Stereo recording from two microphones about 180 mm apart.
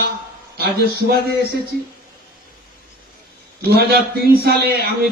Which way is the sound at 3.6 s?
60° right (ahead or behind).